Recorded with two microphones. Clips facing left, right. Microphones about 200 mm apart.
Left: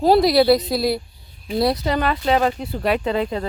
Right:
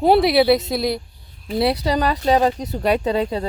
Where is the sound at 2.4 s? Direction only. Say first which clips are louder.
Right 2 dB; 20° right (ahead or behind).